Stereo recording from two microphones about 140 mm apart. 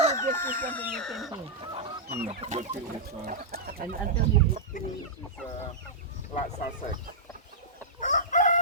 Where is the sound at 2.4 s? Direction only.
50° right (ahead or behind).